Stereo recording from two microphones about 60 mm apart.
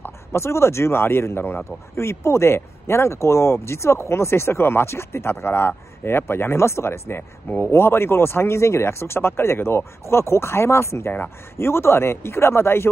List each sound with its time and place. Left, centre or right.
0.0 s speech: left
11.1 s speech: left